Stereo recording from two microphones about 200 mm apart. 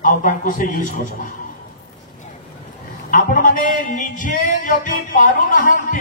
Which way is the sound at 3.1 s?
45° left (ahead or behind).